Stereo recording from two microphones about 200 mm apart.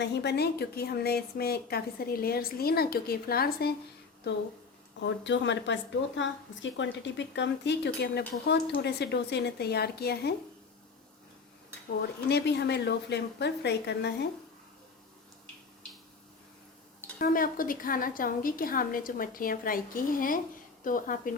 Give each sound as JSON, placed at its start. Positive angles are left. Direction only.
{"t": 0.0, "sound": "speech", "side_deg": 60}
{"t": 4.9, "sound": "a woman's voice", "side_deg": 65}
{"t": 11.9, "sound": "a woman's voice", "side_deg": 55}
{"t": 17.2, "sound": "speech", "side_deg": 45}